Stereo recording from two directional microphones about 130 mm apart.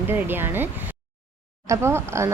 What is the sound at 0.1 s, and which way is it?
Speech, 15° right (ahead or behind).